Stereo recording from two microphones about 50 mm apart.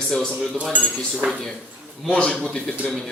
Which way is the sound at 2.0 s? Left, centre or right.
Left.